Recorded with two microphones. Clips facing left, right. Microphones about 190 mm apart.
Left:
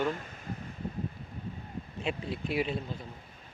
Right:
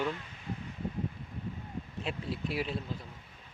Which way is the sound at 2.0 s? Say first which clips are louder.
Left 3 dB; centre (ahead or behind).